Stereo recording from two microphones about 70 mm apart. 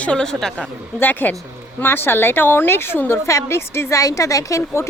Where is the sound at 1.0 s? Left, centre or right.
Left.